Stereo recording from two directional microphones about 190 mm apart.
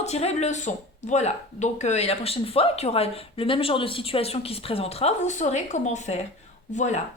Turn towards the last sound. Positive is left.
turn(degrees=35)  # may be behind; listen again after turning